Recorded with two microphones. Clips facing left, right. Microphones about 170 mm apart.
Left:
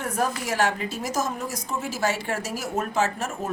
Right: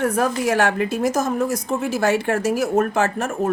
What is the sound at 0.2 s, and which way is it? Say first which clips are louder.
A woman's voice: right 2 dB; 60° right (ahead or behind).